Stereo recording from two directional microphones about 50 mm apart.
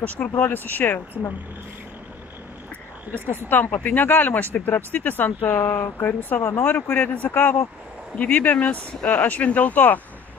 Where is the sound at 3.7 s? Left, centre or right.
Left.